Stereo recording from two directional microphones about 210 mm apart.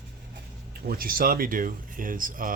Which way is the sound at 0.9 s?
45° right (ahead or behind).